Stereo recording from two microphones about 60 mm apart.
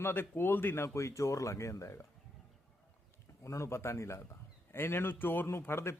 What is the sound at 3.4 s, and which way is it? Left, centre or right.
Speech, left.